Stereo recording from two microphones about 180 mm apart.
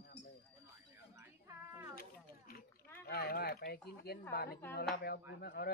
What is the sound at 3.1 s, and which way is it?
Speech, 60° left (ahead or behind).